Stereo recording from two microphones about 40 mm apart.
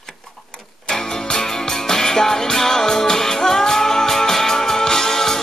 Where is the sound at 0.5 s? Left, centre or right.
Left.